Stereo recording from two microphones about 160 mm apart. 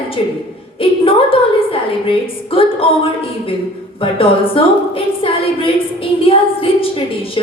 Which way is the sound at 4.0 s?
35° left (ahead or behind).